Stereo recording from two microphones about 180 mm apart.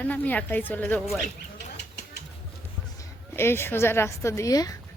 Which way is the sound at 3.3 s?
15° left (ahead or behind).